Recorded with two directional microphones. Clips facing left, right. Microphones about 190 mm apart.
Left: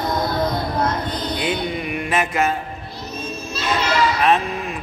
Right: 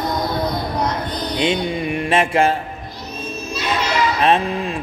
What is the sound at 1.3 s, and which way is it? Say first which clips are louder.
Mantra: right 6 dB; 25° right (ahead or behind).